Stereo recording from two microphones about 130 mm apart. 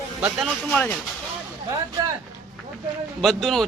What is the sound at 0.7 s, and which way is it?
Speech, 10° left (ahead or behind).